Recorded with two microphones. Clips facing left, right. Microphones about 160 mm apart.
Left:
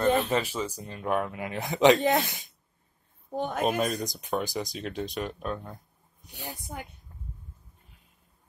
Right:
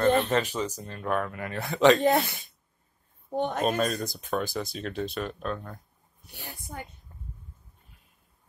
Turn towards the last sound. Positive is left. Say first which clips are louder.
# left 4 dB
turn(degrees=15)  # may be behind; listen again after turning